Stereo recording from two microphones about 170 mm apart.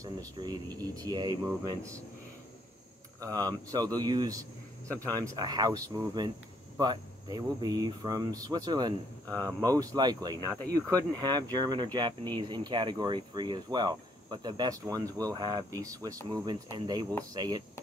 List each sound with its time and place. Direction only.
0.0 s speech: 25° right (ahead or behind)
3.2 s speech: 20° right (ahead or behind)